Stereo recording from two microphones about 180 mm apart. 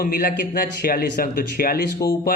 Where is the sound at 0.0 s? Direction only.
55° left (ahead or behind).